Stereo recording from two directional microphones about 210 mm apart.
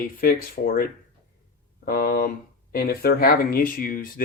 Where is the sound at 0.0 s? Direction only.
45° left (ahead or behind).